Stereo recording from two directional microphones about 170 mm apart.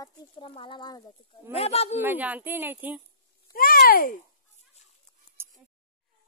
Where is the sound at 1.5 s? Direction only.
35° left (ahead or behind).